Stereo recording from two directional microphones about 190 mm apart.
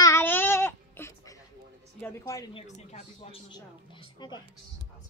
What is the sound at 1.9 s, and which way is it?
Speech, 10° left (ahead or behind).